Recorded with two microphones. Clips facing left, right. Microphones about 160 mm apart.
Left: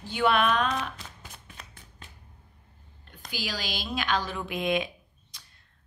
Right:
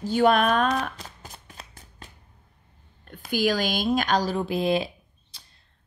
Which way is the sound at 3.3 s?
50° right (ahead or behind).